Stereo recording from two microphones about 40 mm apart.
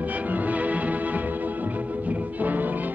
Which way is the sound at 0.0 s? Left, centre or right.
Right.